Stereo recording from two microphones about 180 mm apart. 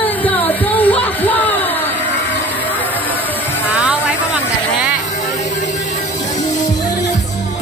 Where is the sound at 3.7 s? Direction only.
5° right (ahead or behind).